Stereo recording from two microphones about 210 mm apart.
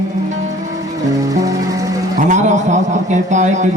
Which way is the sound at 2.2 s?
35° right (ahead or behind).